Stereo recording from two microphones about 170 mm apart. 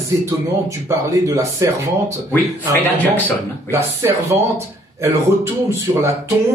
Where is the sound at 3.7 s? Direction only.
15° right (ahead or behind).